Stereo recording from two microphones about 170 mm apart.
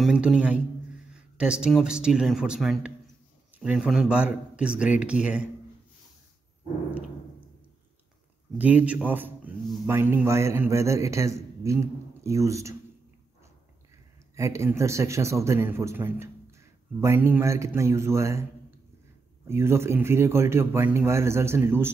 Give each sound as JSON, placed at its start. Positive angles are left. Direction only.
{"t": 0.0, "sound": "a man's voice", "side_deg": 0}
{"t": 8.5, "sound": "a man's voice", "side_deg": -10}
{"t": 14.3, "sound": "a man's voice", "side_deg": -15}
{"t": 19.4, "sound": "a man's voice", "side_deg": -15}